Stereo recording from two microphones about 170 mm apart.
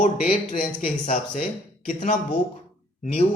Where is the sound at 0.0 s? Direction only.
55° left (ahead or behind).